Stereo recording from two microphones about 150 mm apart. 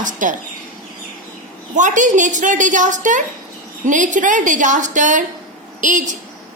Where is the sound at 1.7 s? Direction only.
55° right (ahead or behind).